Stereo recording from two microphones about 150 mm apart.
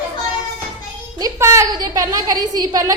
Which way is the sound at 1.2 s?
20° right (ahead or behind).